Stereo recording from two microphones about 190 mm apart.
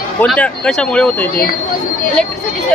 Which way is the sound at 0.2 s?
5° left (ahead or behind).